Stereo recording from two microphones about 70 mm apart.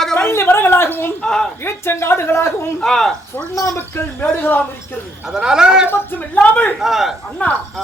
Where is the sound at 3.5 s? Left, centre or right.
Left.